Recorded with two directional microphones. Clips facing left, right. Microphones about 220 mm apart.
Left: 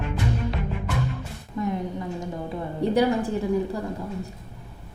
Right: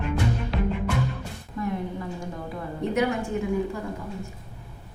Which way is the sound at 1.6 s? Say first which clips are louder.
Left 2 dB; 25° left (ahead or behind).